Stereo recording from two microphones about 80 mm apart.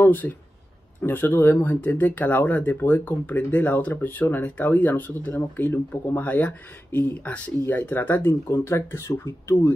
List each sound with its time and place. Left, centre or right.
0.0 s speech: left